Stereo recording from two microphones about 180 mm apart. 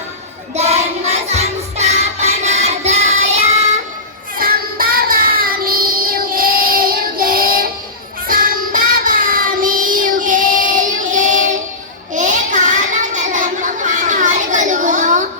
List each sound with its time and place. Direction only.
0.5 s child singing: 35° right (ahead or behind)
4.4 s child singing: 55° right (ahead or behind)
12.1 s a sound: 45° right (ahead or behind)